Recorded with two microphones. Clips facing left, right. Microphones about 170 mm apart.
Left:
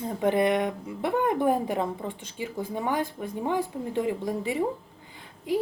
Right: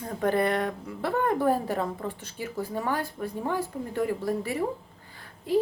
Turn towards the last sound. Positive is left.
turn(degrees=15)  # may be behind; listen again after turning